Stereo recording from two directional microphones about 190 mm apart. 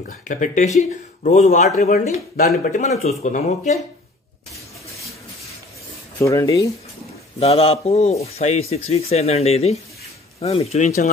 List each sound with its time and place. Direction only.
0.0 s speech: 45° left (ahead or behind)
6.1 s speech: 15° left (ahead or behind)
7.3 s speech: 30° left (ahead or behind)